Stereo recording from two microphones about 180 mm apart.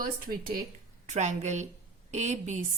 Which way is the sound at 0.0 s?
55° right (ahead or behind).